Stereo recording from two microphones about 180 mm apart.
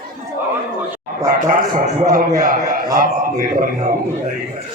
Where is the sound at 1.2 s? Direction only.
50° right (ahead or behind).